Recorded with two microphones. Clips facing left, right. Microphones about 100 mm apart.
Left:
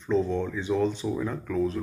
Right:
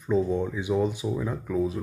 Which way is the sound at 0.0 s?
10° right (ahead or behind).